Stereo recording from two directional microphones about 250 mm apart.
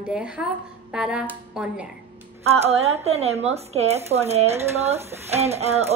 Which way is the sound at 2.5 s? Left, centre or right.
Right.